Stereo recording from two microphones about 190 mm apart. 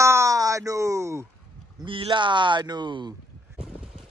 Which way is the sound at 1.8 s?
25° right (ahead or behind).